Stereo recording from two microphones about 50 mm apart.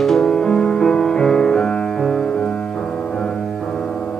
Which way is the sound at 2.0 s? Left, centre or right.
Centre.